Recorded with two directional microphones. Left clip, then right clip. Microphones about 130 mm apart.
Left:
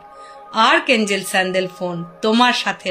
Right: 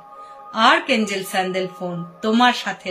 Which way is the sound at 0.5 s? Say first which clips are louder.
Left 2 dB; 55° left (ahead or behind).